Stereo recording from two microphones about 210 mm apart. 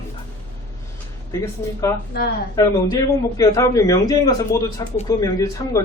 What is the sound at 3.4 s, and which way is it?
A man's voice, 15° left (ahead or behind).